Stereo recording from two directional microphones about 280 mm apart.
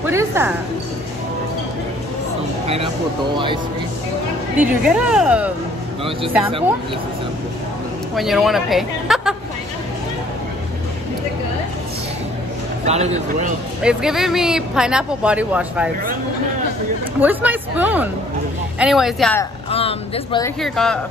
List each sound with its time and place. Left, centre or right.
0.0 s music: centre
2.6 s speech: right
4.6 s speech: centre
8.2 s speech: centre
12.8 s speech: right
13.8 s speech: centre
17.2 s speech: centre
19.7 s speech: left
20.6 s speech: centre